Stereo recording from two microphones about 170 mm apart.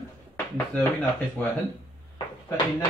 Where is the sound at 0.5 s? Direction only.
10° left (ahead or behind).